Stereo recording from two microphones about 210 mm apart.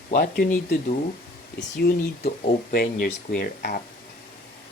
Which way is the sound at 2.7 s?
45° left (ahead or behind).